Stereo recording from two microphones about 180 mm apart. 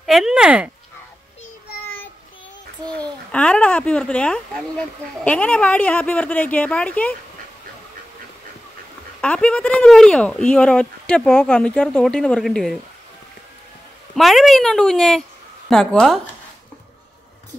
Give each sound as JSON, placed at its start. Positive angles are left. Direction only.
{"t": 0.0, "sound": "speech", "side_deg": 0}
{"t": 2.9, "sound": "a child's voice", "side_deg": 5}
{"t": 9.2, "sound": "speech", "side_deg": 5}
{"t": 14.1, "sound": "speech", "side_deg": 0}